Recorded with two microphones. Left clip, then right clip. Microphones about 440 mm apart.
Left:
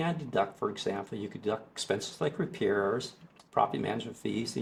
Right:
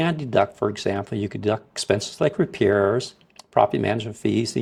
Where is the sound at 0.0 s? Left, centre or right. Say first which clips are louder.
Right 10 dB; right.